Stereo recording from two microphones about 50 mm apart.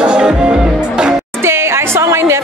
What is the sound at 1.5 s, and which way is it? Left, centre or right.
Music, right.